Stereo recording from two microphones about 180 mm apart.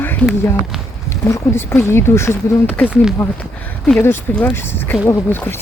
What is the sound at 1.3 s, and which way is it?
Speech, 15° left (ahead or behind).